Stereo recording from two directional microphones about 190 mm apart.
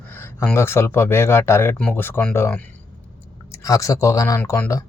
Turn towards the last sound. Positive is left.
turn(degrees=15)  # may be behind; listen again after turning